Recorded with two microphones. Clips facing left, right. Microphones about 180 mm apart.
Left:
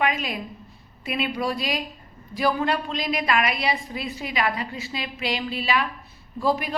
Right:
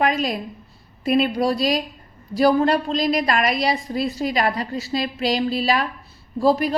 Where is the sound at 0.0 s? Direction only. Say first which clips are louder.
Right 5 dB; 40° right (ahead or behind).